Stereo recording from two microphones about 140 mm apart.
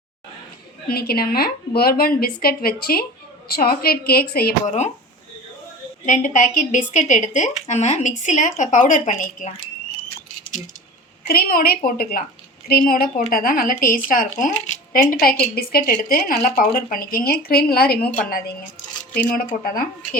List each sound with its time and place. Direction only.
0.9 s speech: 90° left
6.1 s a woman's voice: 65° left (ahead or behind)
11.3 s speech: 90° left